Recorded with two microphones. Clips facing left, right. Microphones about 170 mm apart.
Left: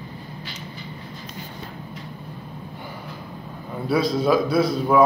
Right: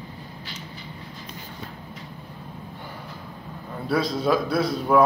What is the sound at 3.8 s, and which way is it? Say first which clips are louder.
A man's voice: left 3 dB; 5° left (ahead or behind).